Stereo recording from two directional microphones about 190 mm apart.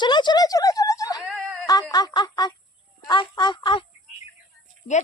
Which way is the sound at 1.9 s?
20° left (ahead or behind).